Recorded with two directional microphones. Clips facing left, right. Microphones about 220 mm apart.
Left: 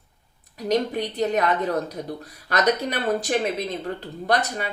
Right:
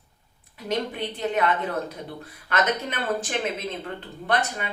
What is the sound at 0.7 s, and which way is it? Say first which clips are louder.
Speech: left 5 dB; 40° left (ahead or behind).